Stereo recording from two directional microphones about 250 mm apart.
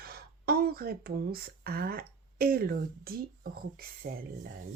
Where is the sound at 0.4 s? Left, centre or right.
Right.